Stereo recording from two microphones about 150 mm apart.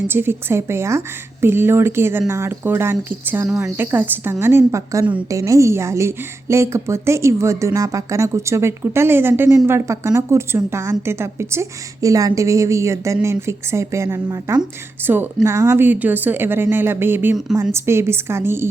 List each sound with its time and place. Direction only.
0.1 s a woman's voice: 15° right (ahead or behind)